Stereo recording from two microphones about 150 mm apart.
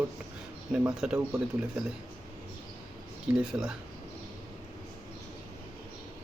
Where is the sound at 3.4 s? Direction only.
5° right (ahead or behind).